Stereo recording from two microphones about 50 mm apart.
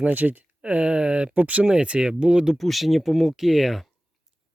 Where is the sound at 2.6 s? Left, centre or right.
Centre.